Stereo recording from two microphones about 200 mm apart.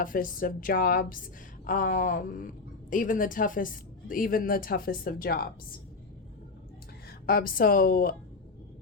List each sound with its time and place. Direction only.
0.0 s a woman's voice: 45° left (ahead or behind)
7.3 s a woman's voice: 45° left (ahead or behind)